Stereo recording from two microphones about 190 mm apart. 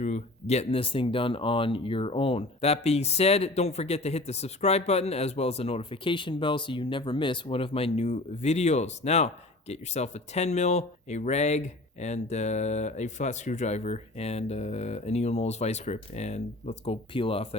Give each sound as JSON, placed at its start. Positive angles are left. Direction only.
{"t": 0.0, "sound": "speech", "side_deg": 35}